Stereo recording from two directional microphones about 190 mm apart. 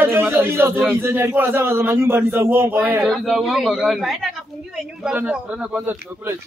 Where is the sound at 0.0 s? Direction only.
10° right (ahead or behind).